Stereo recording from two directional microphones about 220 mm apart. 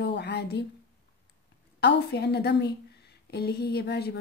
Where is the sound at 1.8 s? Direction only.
50° left (ahead or behind).